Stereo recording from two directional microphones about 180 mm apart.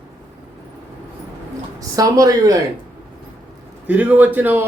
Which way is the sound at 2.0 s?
20° right (ahead or behind).